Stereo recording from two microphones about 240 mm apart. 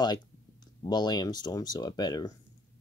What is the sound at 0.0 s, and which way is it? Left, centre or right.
Speech, centre.